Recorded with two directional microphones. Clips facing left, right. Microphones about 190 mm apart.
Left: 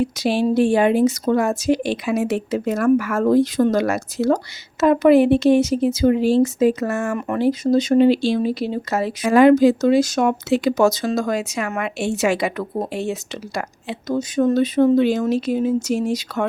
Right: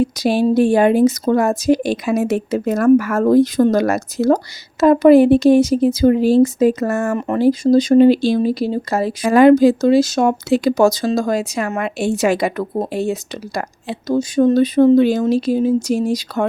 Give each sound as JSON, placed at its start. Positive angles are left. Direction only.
{"t": 0.0, "sound": "speech", "side_deg": -40}